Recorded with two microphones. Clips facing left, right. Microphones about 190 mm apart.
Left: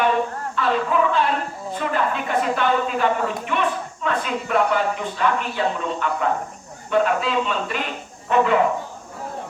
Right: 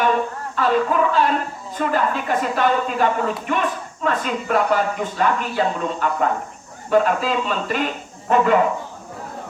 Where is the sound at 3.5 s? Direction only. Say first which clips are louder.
Right 1 dB; 45° right (ahead or behind).